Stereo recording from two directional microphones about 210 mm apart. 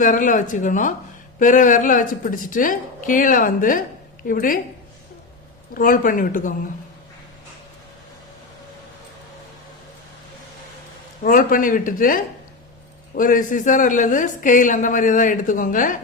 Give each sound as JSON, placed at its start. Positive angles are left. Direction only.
{"t": 0.0, "sound": "a woman's voice", "side_deg": 40}
{"t": 5.7, "sound": "a woman's voice", "side_deg": 40}
{"t": 11.2, "sound": "a woman's voice", "side_deg": 40}